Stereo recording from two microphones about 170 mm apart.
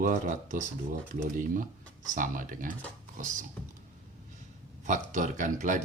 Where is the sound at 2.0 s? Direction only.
50° right (ahead or behind).